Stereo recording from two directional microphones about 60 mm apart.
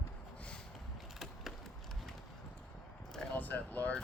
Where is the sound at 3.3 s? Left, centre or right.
Left.